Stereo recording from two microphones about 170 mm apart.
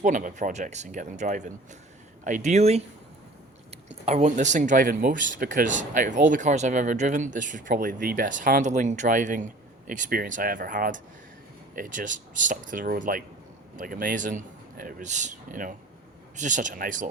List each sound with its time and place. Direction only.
0.0 s speech: 50° right (ahead or behind)
4.0 s speech: 40° right (ahead or behind)